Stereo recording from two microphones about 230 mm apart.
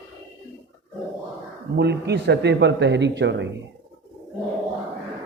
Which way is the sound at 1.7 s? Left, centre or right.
Right.